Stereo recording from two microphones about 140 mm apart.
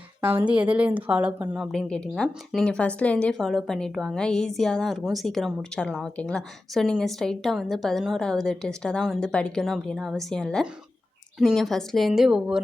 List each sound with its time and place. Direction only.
0.3 s a woman's voice: 10° right (ahead or behind)
1.7 s a woman's voice: 5° left (ahead or behind)